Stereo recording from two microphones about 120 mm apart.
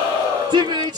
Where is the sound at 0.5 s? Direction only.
35° right (ahead or behind).